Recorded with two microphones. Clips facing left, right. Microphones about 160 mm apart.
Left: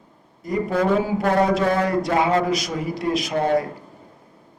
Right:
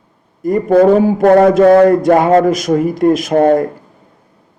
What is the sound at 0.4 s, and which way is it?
Speech, 50° right (ahead or behind).